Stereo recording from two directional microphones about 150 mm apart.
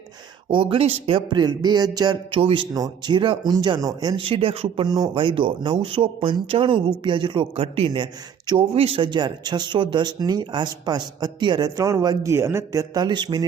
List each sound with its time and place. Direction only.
0.5 s speech: 35° right (ahead or behind)
8.7 s speech: 40° right (ahead or behind)